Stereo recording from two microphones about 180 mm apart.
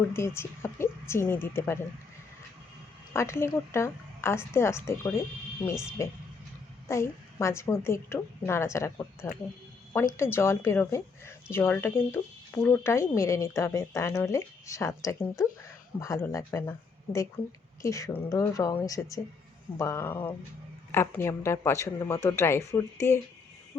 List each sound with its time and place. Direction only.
0.1 s speech: 15° left (ahead or behind)
3.1 s a woman's voice: 15° left (ahead or behind)